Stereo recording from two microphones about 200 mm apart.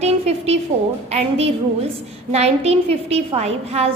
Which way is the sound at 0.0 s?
30° right (ahead or behind).